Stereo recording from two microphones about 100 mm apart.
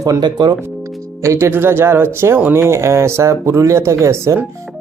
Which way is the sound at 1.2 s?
30° right (ahead or behind).